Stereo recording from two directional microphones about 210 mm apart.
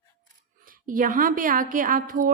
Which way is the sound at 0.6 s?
40° right (ahead or behind).